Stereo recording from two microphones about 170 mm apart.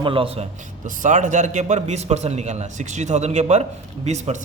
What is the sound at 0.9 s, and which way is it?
A man's voice, 45° right (ahead or behind).